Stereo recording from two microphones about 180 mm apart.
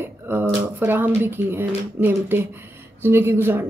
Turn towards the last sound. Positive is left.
turn(degrees=-10)  # may be behind; listen again after turning